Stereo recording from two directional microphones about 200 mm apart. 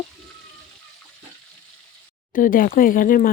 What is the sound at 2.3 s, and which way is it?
Speech, 45° left (ahead or behind).